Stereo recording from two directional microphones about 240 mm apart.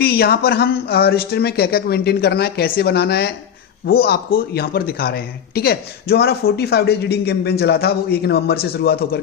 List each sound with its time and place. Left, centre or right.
0.0 s speech: left